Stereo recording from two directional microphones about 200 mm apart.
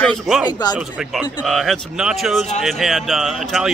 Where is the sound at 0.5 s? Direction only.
20° left (ahead or behind).